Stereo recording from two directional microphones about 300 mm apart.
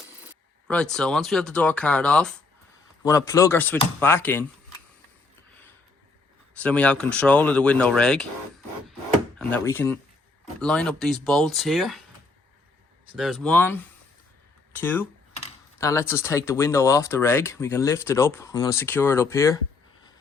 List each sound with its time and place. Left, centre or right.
0.7 s speech: centre
6.6 s speech: centre
9.4 s speech: centre
13.1 s speech: centre
14.8 s speech: centre